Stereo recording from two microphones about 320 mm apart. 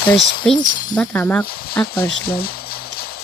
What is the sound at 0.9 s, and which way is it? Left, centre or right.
Speech, centre.